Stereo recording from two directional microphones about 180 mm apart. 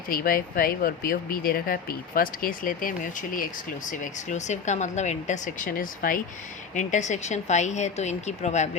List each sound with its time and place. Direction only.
0.1 s speech: 55° left (ahead or behind)